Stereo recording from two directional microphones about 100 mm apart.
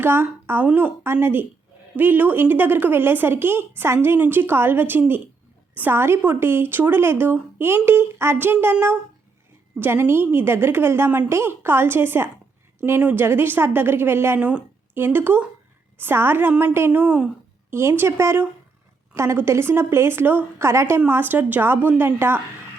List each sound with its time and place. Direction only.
0.0 s a woman's voice: 20° right (ahead or behind)
9.7 s a woman's voice: 20° right (ahead or behind)
17.7 s a woman's voice: 25° right (ahead or behind)